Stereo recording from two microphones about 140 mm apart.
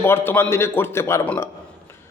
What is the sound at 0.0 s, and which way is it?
A man's voice, 15° left (ahead or behind).